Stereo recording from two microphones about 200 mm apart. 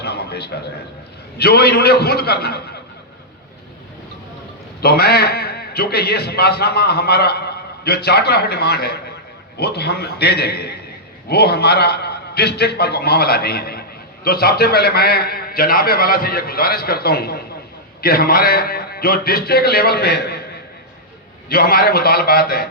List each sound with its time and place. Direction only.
0.0 s a sound: 55° left (ahead or behind)
1.4 s a man's voice: 50° left (ahead or behind)
4.8 s a man's voice: 50° left (ahead or behind)